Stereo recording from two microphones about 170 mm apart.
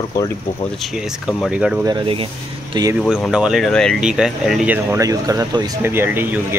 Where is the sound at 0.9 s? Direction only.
Centre (ahead or behind).